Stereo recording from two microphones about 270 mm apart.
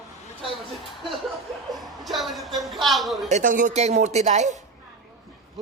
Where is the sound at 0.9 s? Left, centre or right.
Centre.